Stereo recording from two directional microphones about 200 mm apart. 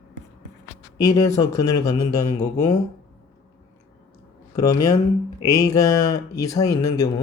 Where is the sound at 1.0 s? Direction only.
20° left (ahead or behind).